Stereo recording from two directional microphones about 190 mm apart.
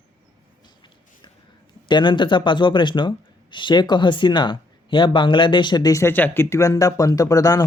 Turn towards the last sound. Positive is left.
turn(degrees=20)  # may be behind; listen again after turning